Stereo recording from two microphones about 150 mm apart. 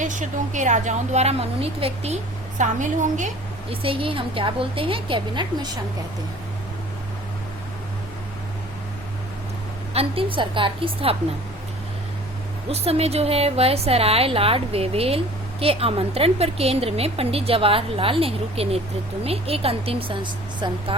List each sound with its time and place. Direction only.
0.0 s a woman's voice: 55° right (ahead or behind)
2.6 s a woman's voice: 55° right (ahead or behind)
3.7 s a woman's voice: 35° right (ahead or behind)
9.9 s a woman's voice: 40° right (ahead or behind)
12.6 s a woman's voice: 40° right (ahead or behind)